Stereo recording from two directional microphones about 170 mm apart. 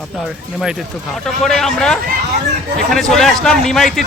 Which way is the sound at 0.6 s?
Centre (ahead or behind).